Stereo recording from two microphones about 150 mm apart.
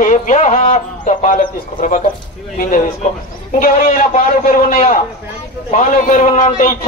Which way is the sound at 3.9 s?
60° left (ahead or behind).